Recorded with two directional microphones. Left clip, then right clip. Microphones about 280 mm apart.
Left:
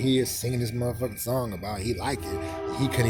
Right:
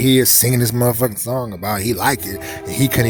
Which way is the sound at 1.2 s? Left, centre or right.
Centre.